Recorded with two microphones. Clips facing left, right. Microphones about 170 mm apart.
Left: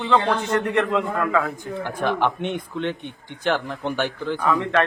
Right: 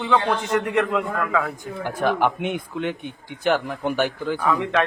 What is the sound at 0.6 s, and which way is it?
A man's voice, 5° right (ahead or behind).